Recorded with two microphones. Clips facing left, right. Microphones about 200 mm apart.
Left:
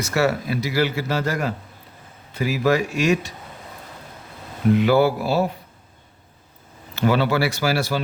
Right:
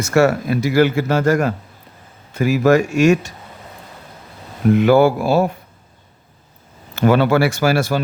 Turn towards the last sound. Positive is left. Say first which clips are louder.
# right 5 dB
turn(degrees=-50)  # may be behind; listen again after turning